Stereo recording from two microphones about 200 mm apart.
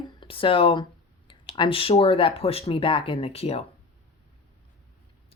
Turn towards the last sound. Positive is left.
turn(degrees=30)  # may be behind; listen again after turning